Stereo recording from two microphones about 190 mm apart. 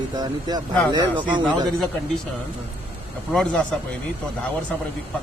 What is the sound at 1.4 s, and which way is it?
Speech, 5° left (ahead or behind).